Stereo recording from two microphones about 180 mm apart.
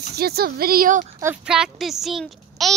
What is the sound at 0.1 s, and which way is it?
Speech, 60° right (ahead or behind).